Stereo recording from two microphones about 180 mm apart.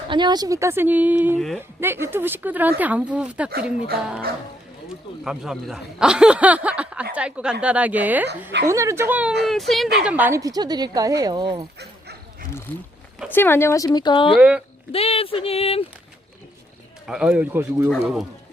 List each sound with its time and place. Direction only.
0.1 s speech: 25° right (ahead or behind); by 1.4 s 10° right (ahead or behind)
1.4 s speech: centre (ahead or behind)
1.8 s speech: 15° right (ahead or behind)
5.2 s a woman's voice: 5° right (ahead or behind); by 11.6 s 25° right (ahead or behind)
11.8 s bow-wow: 65° right (ahead or behind)
12.7 s speech: 10° left (ahead or behind); by 14.3 s 25° left (ahead or behind)
14.3 s speech: 5° right (ahead or behind)
14.9 s a sound: 35° left (ahead or behind)
17.1 s speech: 5° right (ahead or behind)